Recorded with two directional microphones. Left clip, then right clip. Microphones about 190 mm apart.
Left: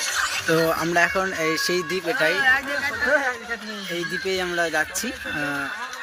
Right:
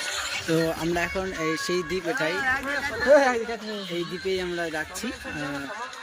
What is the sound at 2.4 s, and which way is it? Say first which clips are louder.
Speech: left 6 dB; 25° right (ahead or behind).